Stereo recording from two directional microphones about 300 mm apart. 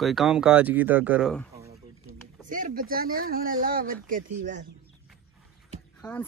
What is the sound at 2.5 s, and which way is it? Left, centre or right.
Speech, right.